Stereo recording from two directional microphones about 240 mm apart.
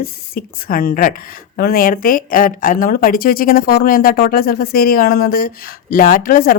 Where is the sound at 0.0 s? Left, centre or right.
Left.